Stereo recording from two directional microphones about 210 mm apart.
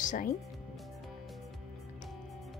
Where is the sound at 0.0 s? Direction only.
40° left (ahead or behind).